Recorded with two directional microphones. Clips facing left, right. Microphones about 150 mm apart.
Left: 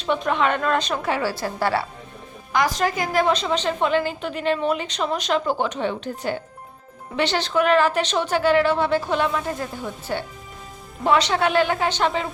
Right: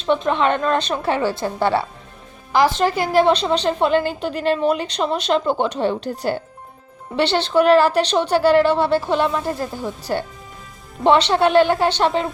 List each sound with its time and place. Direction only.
0.2 s a woman's voice: 30° right (ahead or behind)